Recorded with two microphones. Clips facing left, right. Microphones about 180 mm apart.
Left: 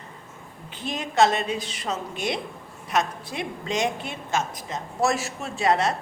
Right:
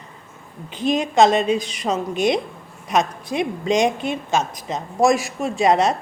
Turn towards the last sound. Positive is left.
turn(degrees=-20)  # may be behind; listen again after turning